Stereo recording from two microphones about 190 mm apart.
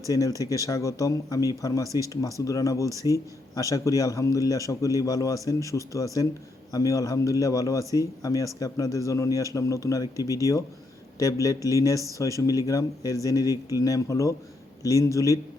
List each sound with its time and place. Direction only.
0.1 s speech: 15° left (ahead or behind)